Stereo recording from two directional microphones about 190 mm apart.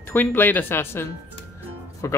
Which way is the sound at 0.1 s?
10° left (ahead or behind).